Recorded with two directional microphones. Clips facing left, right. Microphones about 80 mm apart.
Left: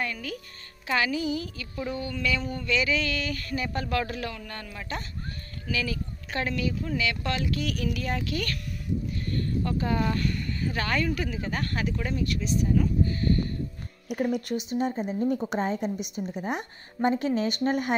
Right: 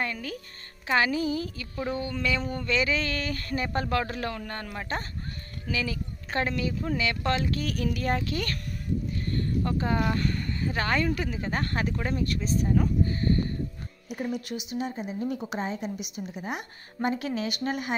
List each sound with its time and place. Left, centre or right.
0.0 s a woman's voice: right
5.7 s a woman's voice: right
14.1 s speech: left
14.6 s a woman's voice: left